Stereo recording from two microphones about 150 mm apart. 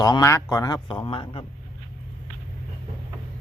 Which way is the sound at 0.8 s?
35° left (ahead or behind).